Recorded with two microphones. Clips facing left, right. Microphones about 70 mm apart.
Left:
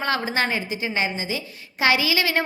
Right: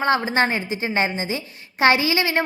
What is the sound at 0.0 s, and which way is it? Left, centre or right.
A woman's voice, right.